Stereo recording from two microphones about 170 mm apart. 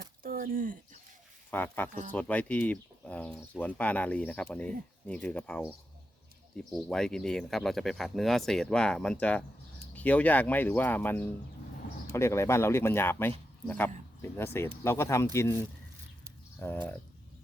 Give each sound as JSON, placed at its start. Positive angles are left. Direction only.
{"t": 0.2, "sound": "a sound", "side_deg": -55}
{"t": 1.5, "sound": "speech", "side_deg": 10}
{"t": 16.6, "sound": "speech", "side_deg": 15}